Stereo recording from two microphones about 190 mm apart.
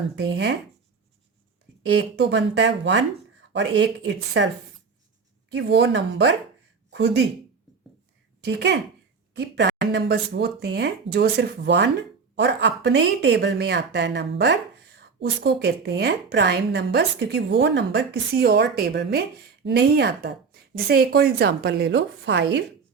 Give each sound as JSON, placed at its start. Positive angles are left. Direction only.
{"t": 0.2, "sound": "speech", "side_deg": -65}
{"t": 1.9, "sound": "speech", "side_deg": -65}
{"t": 5.5, "sound": "speech", "side_deg": -65}
{"t": 8.4, "sound": "speech", "side_deg": -65}